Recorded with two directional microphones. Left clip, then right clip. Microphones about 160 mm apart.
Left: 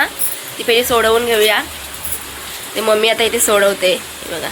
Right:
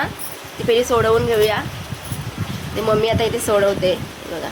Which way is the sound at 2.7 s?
Centre (ahead or behind).